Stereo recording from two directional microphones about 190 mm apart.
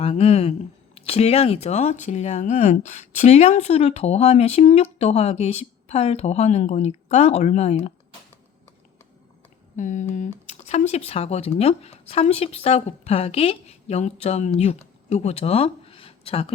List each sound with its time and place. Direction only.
0.0 s speech: 30° left (ahead or behind)
9.7 s speech: 40° left (ahead or behind)